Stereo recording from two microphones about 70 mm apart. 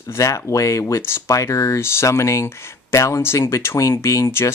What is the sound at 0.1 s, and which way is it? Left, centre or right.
Speech, left.